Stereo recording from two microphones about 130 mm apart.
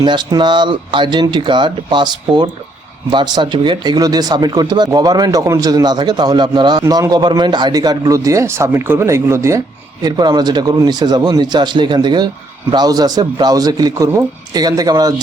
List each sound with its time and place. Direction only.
0.0 s speech: 35° right (ahead or behind)
10.0 s a man's voice: 30° right (ahead or behind)